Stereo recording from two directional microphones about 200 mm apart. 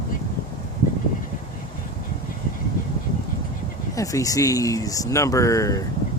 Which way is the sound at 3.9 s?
15° left (ahead or behind).